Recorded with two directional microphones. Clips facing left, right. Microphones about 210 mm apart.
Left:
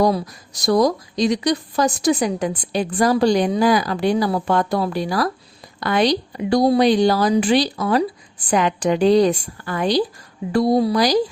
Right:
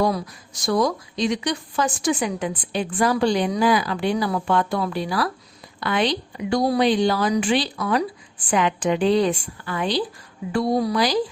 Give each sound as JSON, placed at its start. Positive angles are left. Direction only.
{"t": 0.0, "sound": "speech", "side_deg": 40}